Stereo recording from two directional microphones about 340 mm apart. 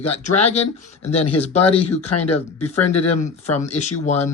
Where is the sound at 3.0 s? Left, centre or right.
Centre.